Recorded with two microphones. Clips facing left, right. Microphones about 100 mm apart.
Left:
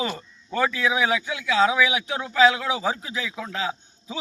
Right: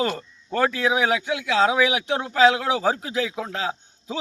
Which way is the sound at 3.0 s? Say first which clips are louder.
Right 6 dB; 60° right (ahead or behind).